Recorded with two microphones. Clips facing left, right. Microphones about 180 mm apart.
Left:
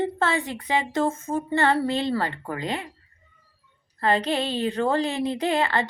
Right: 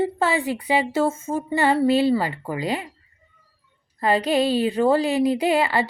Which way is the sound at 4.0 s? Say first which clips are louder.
Right 4 dB; 10° right (ahead or behind).